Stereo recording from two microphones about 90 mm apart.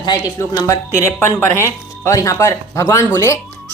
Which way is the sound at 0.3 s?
40° left (ahead or behind).